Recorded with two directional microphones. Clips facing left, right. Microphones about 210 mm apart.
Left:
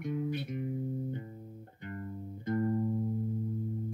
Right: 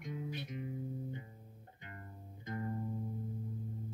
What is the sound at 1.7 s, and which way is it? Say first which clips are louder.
Music: left 11 dB; 50° left (ahead or behind).